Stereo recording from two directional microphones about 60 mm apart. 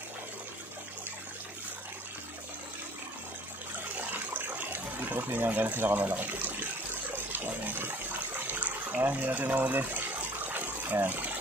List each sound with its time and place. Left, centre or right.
3.9 s water: right
7.1 s a sound: right
8.5 s water: right